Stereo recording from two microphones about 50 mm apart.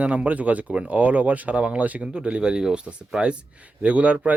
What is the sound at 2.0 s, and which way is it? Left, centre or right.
Speech, centre.